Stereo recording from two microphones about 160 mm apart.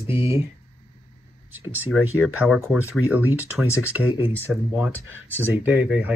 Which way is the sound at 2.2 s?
Centre (ahead or behind).